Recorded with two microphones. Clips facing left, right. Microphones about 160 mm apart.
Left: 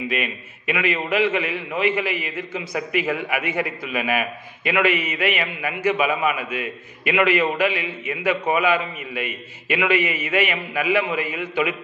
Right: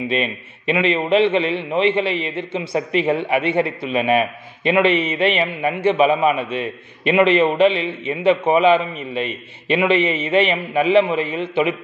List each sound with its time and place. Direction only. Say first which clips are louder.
0.1 s a man's voice: right 5 dB; 30° right (ahead or behind)